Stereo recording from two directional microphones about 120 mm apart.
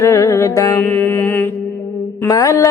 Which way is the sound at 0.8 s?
15° left (ahead or behind).